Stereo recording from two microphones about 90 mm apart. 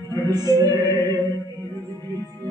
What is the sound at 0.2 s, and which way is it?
Music, 45° right (ahead or behind).